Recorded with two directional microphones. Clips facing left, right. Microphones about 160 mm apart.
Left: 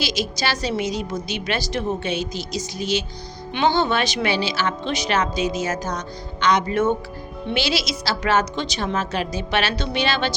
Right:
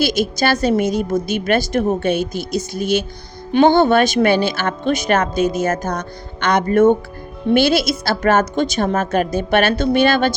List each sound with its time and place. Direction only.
0.0 s speech: 55° right (ahead or behind)